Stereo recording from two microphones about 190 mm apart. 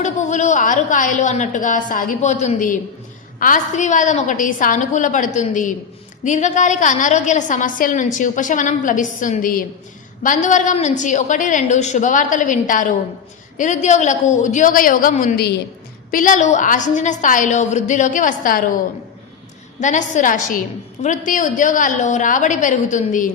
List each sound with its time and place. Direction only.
0.0 s a woman's voice: 40° left (ahead or behind)
19.8 s a woman's voice: 40° left (ahead or behind)